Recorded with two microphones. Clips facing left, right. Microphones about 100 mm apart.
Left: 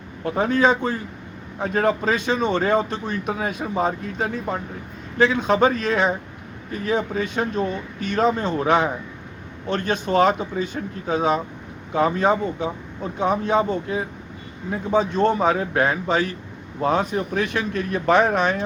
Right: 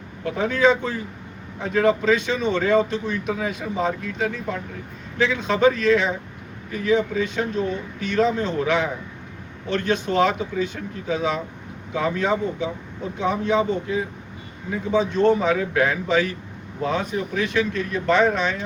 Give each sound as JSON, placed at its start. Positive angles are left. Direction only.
{"t": 0.3, "sound": "a man's voice", "side_deg": 40}